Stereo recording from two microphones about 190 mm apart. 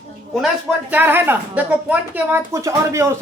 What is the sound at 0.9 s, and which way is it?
Speech, 10° right (ahead or behind).